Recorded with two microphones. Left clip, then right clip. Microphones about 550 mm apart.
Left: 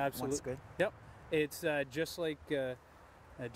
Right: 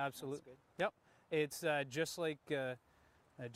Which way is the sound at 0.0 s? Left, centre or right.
Right.